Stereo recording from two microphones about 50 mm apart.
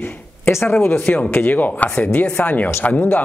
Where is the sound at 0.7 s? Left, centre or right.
Left.